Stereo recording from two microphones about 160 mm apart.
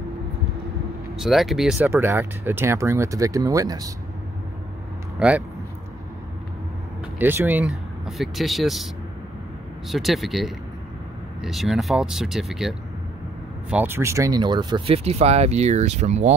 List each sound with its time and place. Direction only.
1.1 s speech: centre (ahead or behind)
1.9 s speech: 10° right (ahead or behind)
5.2 s speech: 5° right (ahead or behind)
7.2 s speech: 10° right (ahead or behind)
8.2 s speech: centre (ahead or behind)
9.8 s speech: centre (ahead or behind); by 16.3 s 45° right (ahead or behind)